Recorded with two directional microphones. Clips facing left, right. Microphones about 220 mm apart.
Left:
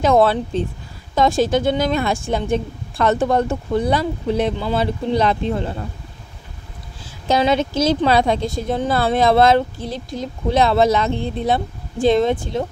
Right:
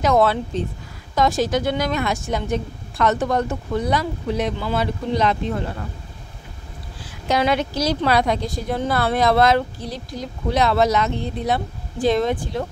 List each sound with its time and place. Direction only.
0.0 s speech: 30° left (ahead or behind)
7.2 s speech: 25° left (ahead or behind)